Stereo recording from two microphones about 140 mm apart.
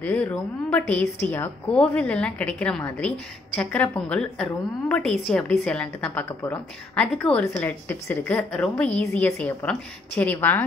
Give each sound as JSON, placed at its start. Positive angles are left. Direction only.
{"t": 0.0, "sound": "a woman's voice", "side_deg": 10}
{"t": 6.2, "sound": "speech", "side_deg": 20}
{"t": 7.0, "sound": "a woman's voice", "side_deg": 10}